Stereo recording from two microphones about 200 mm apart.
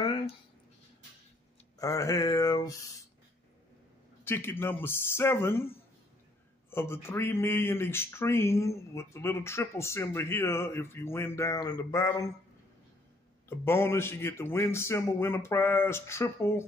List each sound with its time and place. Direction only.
1.8 s speech: 15° left (ahead or behind)
4.2 s speech: 10° left (ahead or behind)
6.7 s speech: 10° left (ahead or behind)
13.5 s speech: 10° left (ahead or behind)